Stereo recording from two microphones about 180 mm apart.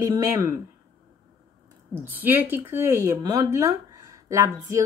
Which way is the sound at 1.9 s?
10° right (ahead or behind).